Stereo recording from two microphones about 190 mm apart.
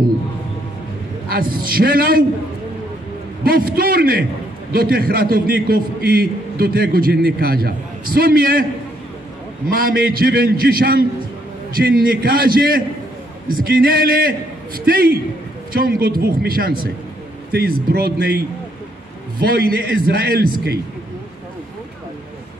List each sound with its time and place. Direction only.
1.3 s a man's voice: 50° right (ahead or behind)
3.4 s a man's voice: 50° right (ahead or behind)
9.7 s a man's voice: 50° right (ahead or behind)
19.5 s a man's voice: 55° right (ahead or behind)